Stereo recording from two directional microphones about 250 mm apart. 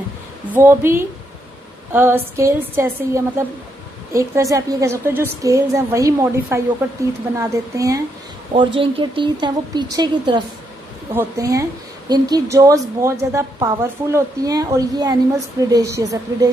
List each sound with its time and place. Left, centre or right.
0.5 s a woman's voice: centre